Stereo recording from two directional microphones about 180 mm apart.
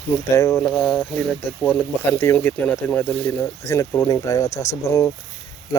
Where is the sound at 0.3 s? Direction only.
15° left (ahead or behind).